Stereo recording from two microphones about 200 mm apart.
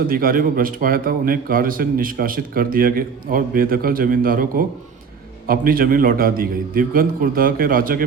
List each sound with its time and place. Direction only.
0.1 s a man's voice: 45° right (ahead or behind)